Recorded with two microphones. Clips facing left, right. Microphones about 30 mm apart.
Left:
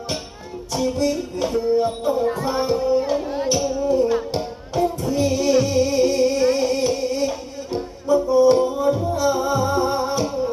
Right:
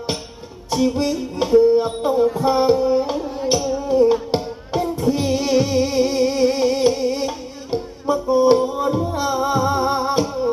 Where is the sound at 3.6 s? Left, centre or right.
Centre.